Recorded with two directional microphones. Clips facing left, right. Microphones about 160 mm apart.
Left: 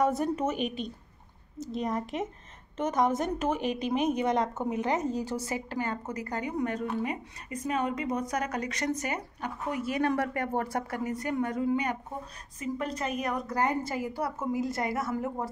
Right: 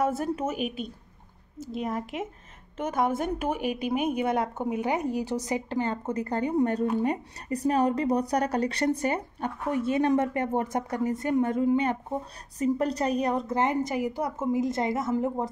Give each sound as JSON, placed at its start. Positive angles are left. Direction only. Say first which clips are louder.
{"t": 0.0, "sound": "a woman's voice", "louder": "even", "side_deg": -5}
{"t": 12.5, "sound": "speech", "louder": "right 7 dB", "side_deg": -35}